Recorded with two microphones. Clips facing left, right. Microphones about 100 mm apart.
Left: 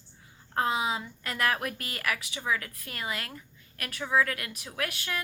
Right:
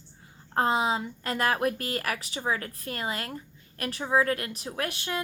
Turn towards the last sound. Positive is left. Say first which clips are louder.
# right 2 dB
turn(degrees=-30)  # may be behind; listen again after turning